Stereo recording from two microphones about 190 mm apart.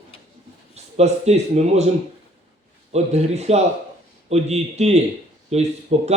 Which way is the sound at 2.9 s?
35° right (ahead or behind).